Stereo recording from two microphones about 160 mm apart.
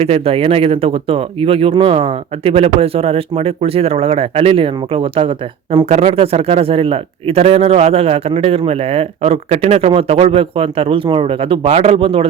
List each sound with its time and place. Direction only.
0.0 s speech: 40° right (ahead or behind)